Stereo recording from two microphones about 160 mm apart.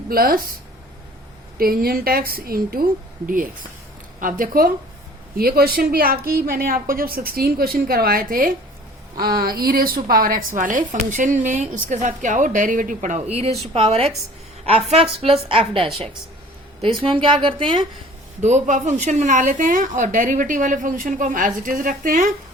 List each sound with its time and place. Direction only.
0.1 s a woman's voice: 65° right (ahead or behind)
1.5 s a woman's voice: 65° right (ahead or behind); by 15.9 s 35° right (ahead or behind)
17.0 s a woman's voice: 35° right (ahead or behind)
18.3 s a woman's voice: 45° right (ahead or behind)